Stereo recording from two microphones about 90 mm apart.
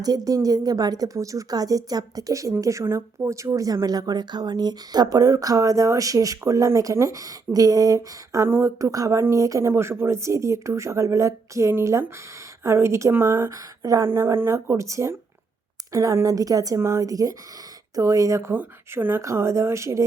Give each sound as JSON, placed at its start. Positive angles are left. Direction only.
{"t": 0.3, "sound": "a woman's voice", "side_deg": -40}
{"t": 14.1, "sound": "a woman's voice", "side_deg": -30}